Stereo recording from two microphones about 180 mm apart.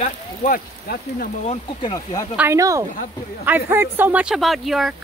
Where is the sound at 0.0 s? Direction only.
40° left (ahead or behind).